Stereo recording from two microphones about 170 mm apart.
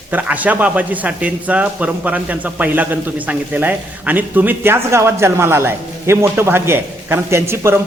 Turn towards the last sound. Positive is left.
turn(degrees=-15)  # may be behind; listen again after turning